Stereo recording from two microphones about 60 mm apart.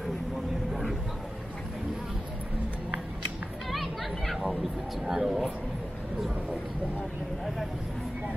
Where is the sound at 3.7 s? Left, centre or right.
Centre.